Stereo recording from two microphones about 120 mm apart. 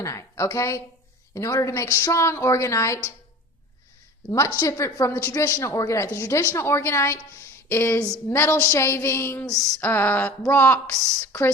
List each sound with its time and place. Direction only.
0.0 s a woman's voice: 25° left (ahead or behind)
4.3 s a woman's voice: 25° left (ahead or behind)
9.8 s a sound: 15° left (ahead or behind)
11.3 s a woman's voice: 20° left (ahead or behind)